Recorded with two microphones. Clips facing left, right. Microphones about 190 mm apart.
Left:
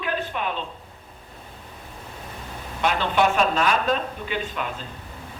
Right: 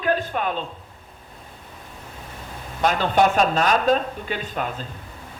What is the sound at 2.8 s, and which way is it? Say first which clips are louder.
A man's voice: right 3 dB; 40° right (ahead or behind).